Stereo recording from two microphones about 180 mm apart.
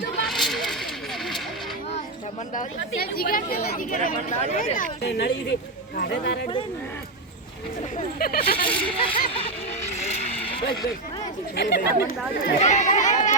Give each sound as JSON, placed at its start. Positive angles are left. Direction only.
{"t": 0.3, "sound": "a sound", "side_deg": 0}
{"t": 2.9, "sound": "speech", "side_deg": 55}
{"t": 5.0, "sound": "speech", "side_deg": 70}
{"t": 7.9, "sound": "speech", "side_deg": 55}
{"t": 8.5, "sound": "speech", "side_deg": 30}
{"t": 10.0, "sound": "vehicle", "side_deg": 30}
{"t": 11.5, "sound": "speech", "side_deg": 65}
{"t": 12.6, "sound": "speech", "side_deg": 40}